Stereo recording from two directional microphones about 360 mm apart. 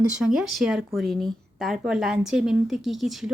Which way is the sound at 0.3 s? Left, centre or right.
Centre.